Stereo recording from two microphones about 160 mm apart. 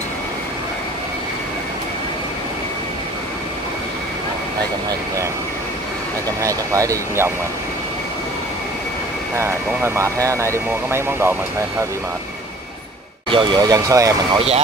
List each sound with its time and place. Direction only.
6.4 s speech: 20° right (ahead or behind)
9.4 s speech: 15° right (ahead or behind)
13.3 s speech: 30° right (ahead or behind)